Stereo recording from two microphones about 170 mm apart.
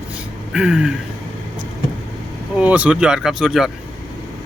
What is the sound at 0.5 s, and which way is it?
Speech, 5° right (ahead or behind).